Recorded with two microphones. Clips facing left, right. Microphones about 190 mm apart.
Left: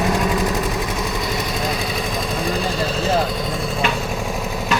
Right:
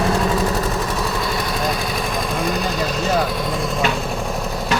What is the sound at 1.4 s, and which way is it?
Vehicle, 25° left (ahead or behind).